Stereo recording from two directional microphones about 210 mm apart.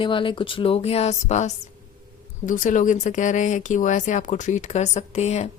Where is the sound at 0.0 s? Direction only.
25° left (ahead or behind).